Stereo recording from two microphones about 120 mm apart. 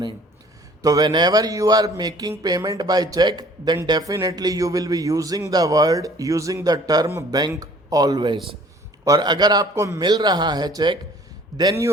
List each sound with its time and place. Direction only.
0.8 s a man's voice: 30° right (ahead or behind)